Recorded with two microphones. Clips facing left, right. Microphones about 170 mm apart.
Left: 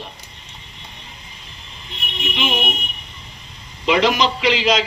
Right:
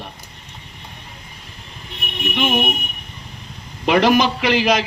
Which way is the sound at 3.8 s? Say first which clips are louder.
Right 2 dB; 55° right (ahead or behind).